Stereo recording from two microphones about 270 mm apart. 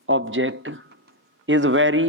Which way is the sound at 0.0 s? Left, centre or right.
Right.